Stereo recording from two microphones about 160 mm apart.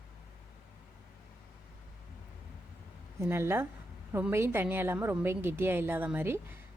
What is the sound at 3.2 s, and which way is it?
A woman's voice, 15° right (ahead or behind).